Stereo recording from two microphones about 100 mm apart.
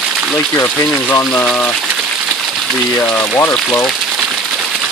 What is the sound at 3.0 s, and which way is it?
Speech, 10° left (ahead or behind).